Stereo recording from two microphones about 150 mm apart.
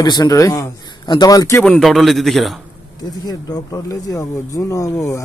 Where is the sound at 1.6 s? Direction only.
5° left (ahead or behind).